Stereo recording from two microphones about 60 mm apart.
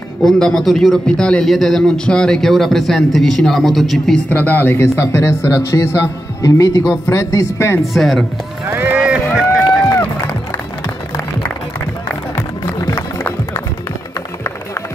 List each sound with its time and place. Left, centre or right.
0.2 s a man's voice: centre
1.4 s a man's voice: centre
4.3 s speech: left
6.9 s speech: left
7.8 s speech: centre
8.6 s run: right
9.0 s run: centre
9.8 s run: left
12.9 s music: left